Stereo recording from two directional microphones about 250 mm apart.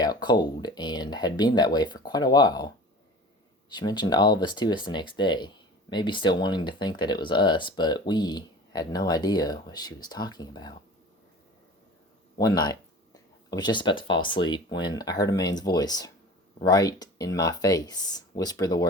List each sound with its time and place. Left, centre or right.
0.0 s speech: centre
12.4 s speech: centre